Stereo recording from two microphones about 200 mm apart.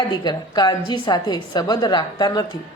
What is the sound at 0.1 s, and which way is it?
Speech, 20° left (ahead or behind).